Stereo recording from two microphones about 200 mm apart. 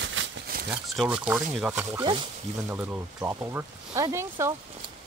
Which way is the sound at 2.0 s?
25° right (ahead or behind).